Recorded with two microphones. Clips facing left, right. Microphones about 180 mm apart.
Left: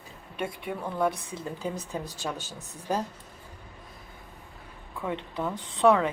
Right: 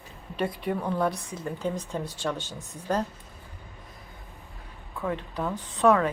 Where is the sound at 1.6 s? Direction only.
5° left (ahead or behind).